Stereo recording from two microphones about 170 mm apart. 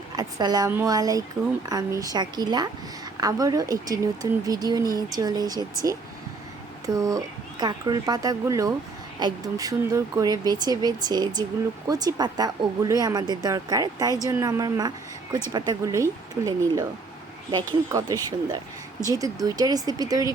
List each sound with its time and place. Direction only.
0.2 s a woman's voice: 20° right (ahead or behind)
6.8 s a woman's voice: 20° right (ahead or behind)